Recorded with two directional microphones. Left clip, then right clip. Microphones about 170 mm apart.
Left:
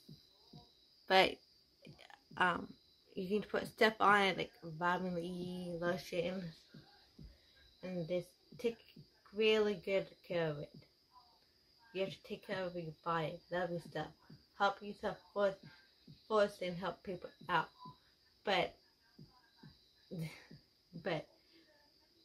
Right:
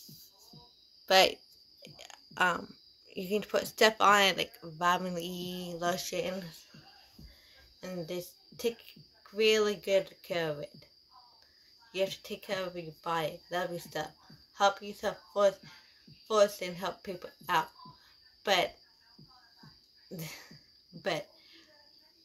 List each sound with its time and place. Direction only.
1.0 s a sound: 30° left (ahead or behind)
3.1 s speech: 25° left (ahead or behind); by 6.3 s 5° left (ahead or behind)
7.8 s speech: centre (ahead or behind)
11.9 s speech: centre (ahead or behind)
20.2 s speech: centre (ahead or behind)